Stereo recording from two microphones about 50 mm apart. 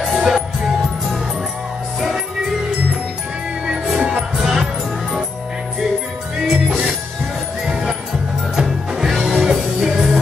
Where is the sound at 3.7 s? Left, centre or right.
Centre.